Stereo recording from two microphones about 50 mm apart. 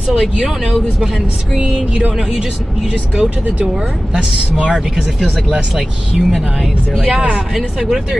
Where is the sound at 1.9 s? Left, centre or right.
Centre.